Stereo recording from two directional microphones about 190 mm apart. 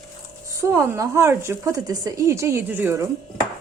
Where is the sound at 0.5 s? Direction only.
15° right (ahead or behind).